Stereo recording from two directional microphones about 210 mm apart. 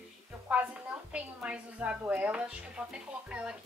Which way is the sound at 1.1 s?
5° right (ahead or behind).